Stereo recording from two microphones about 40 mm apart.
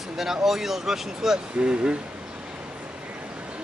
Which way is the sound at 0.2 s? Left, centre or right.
Centre.